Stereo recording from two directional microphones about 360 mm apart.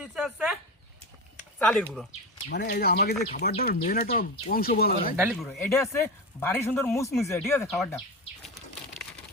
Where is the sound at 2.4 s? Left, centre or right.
Left.